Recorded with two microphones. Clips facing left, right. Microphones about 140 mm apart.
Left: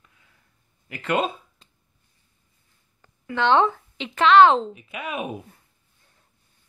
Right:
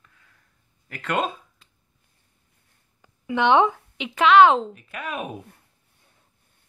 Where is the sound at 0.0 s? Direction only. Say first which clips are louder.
Right 1 dB; 15° left (ahead or behind).